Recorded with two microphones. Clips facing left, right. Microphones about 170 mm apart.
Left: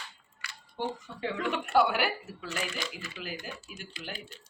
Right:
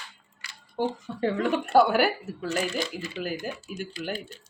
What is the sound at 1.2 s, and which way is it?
Speech, 40° right (ahead or behind).